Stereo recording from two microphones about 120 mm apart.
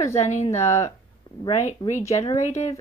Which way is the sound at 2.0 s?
25° left (ahead or behind).